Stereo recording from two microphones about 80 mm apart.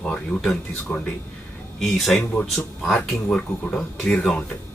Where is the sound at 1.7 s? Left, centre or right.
Centre.